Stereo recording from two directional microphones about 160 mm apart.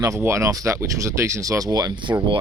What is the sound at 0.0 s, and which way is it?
Speech, 15° right (ahead or behind).